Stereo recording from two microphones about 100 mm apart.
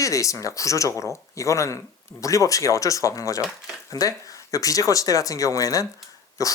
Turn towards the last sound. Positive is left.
turn(degrees=35)  # may be behind; listen again after turning